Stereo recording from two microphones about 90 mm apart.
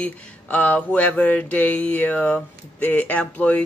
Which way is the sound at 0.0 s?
15° left (ahead or behind).